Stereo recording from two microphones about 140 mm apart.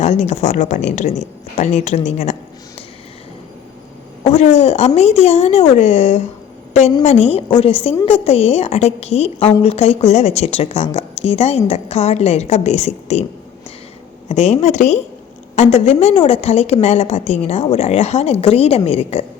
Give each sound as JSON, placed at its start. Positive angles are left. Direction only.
{"t": 0.0, "sound": "speech", "side_deg": 55}
{"t": 4.2, "sound": "a woman's voice", "side_deg": 50}
{"t": 14.3, "sound": "a woman's voice", "side_deg": 50}